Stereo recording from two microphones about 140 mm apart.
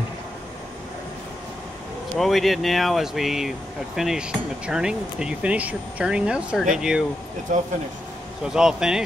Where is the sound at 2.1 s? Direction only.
Centre (ahead or behind).